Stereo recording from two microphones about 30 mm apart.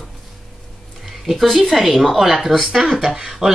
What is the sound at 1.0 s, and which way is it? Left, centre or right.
A woman's voice, centre.